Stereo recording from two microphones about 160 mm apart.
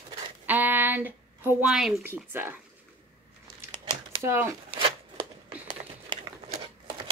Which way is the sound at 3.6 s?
15° right (ahead or behind).